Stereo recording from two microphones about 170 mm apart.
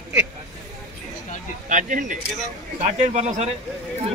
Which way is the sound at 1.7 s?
50° right (ahead or behind).